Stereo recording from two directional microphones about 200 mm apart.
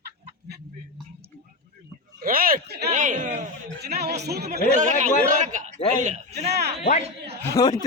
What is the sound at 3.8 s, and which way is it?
Speech, 50° right (ahead or behind).